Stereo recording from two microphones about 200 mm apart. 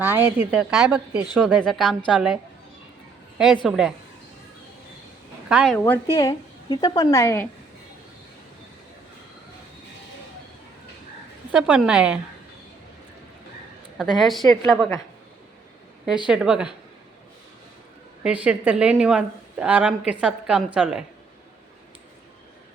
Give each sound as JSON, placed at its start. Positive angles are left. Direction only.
{"t": 0.0, "sound": "a woman's voice", "side_deg": -10}
{"t": 5.5, "sound": "a woman's voice", "side_deg": -5}
{"t": 5.7, "sound": "speech", "side_deg": 10}
{"t": 11.5, "sound": "a woman's voice", "side_deg": -5}
{"t": 14.0, "sound": "a woman's voice", "side_deg": 0}
{"t": 16.2, "sound": "a woman's voice", "side_deg": -5}
{"t": 18.2, "sound": "a woman's voice", "side_deg": -5}